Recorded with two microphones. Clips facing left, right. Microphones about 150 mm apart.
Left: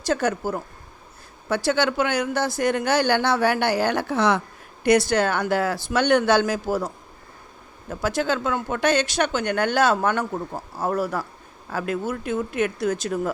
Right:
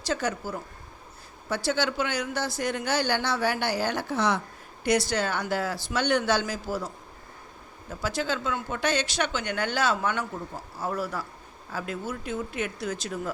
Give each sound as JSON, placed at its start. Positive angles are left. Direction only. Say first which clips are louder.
{"t": 0.1, "sound": "speech", "louder": "left 6 dB", "side_deg": 50}
{"t": 1.5, "sound": "speech", "louder": "left 5 dB", "side_deg": 60}
{"t": 4.8, "sound": "speech", "louder": "left 6 dB", "side_deg": 55}